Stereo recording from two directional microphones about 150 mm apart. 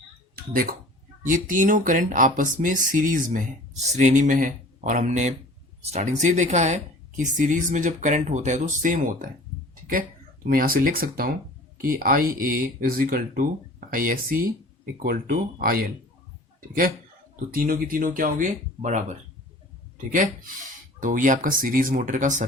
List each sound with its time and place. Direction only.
0.5 s speech: 75° right (ahead or behind)
1.2 s speech: 60° right (ahead or behind)
10.4 s speech: 70° right (ahead or behind)